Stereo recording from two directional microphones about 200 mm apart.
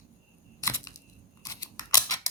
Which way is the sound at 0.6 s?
15° left (ahead or behind).